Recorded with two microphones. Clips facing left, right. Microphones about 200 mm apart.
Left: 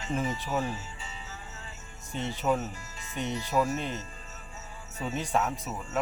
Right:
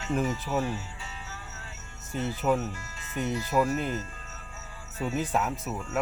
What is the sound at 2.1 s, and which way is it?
Speech, 5° right (ahead or behind).